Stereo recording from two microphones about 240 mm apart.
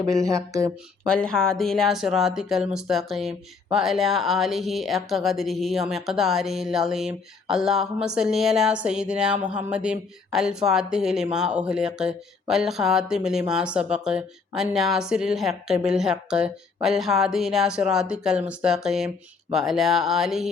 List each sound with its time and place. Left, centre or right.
0.1 s speech: centre
1.0 s speech: centre